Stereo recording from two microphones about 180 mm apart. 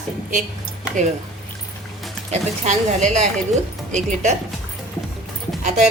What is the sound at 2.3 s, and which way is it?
A woman's voice, 40° right (ahead or behind).